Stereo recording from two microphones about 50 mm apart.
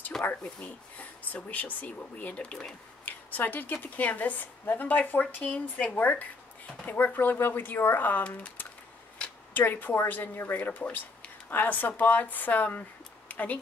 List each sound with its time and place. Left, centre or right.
0.4 s speech: left
3.1 s a woman's voice: left